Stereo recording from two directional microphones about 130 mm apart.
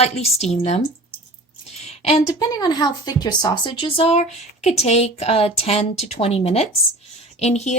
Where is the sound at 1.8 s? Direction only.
50° left (ahead or behind).